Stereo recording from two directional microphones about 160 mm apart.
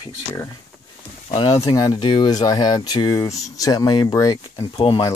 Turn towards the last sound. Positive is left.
turn(degrees=30)  # may be behind; listen again after turning